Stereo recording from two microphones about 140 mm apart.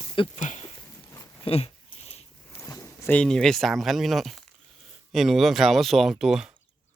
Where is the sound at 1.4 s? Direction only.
45° left (ahead or behind).